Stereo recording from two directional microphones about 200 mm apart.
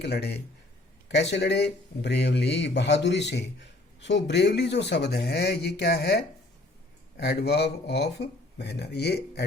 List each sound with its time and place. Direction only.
0.0 s speech: 55° left (ahead or behind)